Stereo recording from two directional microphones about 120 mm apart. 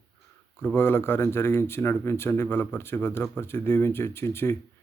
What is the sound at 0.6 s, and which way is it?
Speech, 15° left (ahead or behind).